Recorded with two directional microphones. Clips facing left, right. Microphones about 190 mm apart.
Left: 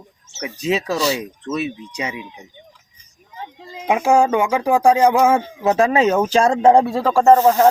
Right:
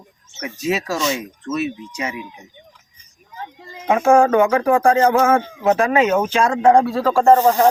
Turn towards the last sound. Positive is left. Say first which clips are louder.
# left 1 dB
turn(degrees=10)  # may be behind; listen again after turning